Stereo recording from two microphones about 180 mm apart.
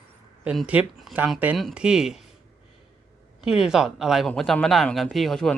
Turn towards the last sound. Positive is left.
turn(degrees=0)  # may be behind; listen again after turning